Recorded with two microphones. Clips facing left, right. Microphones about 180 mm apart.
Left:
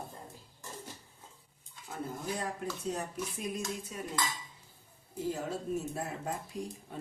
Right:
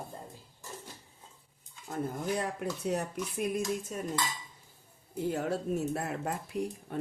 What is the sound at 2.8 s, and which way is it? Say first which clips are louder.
Speech: right 4 dB; 65° right (ahead or behind).